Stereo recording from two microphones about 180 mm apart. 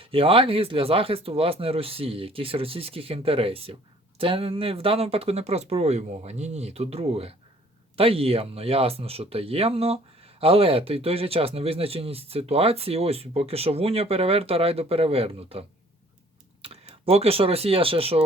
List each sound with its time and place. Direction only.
0.0 s speech: 30° right (ahead or behind)